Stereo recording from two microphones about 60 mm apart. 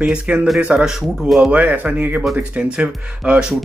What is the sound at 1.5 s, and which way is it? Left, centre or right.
Speech, right.